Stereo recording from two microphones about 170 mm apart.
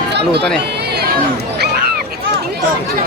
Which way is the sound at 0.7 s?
70° right (ahead or behind).